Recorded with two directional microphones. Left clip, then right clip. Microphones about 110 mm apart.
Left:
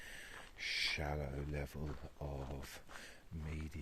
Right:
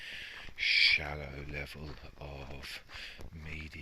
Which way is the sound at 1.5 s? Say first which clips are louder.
Right 4 dB; 40° left (ahead or behind).